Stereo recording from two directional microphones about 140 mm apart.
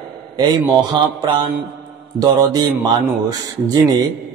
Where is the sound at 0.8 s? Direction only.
35° right (ahead or behind).